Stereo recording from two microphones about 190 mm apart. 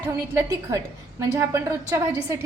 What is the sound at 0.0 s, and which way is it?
A woman's voice, 15° right (ahead or behind).